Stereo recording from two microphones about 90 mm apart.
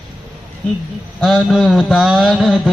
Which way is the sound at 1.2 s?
5° left (ahead or behind).